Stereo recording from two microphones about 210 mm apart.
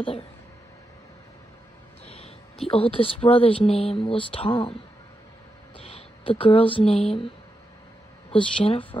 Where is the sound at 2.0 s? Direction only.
30° left (ahead or behind).